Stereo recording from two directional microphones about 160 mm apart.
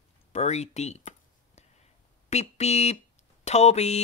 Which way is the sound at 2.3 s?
45° left (ahead or behind).